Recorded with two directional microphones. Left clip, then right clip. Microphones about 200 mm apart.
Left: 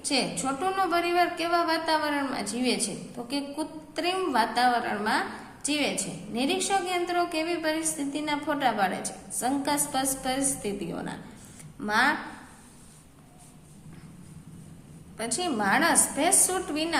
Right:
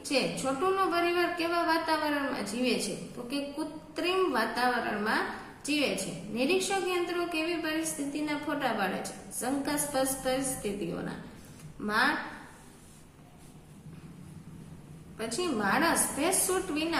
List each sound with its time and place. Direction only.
0.0 s a woman's voice: 40° left (ahead or behind)
15.2 s a woman's voice: 40° left (ahead or behind)